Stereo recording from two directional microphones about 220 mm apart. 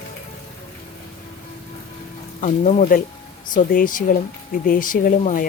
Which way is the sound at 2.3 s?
35° left (ahead or behind).